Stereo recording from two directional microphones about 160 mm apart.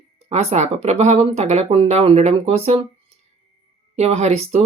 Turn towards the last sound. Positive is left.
turn(degrees=-45)  # may be behind; listen again after turning